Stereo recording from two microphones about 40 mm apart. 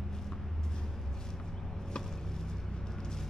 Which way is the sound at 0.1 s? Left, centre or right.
Centre.